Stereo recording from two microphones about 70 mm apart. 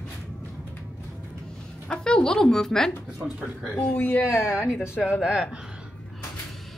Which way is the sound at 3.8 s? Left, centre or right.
Centre.